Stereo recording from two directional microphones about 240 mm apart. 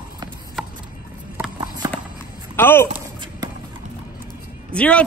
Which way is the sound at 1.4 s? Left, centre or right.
Centre.